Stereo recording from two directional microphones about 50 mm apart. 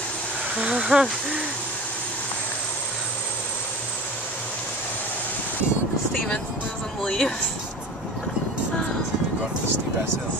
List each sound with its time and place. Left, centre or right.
0.6 s speech: right
7.0 s speech: centre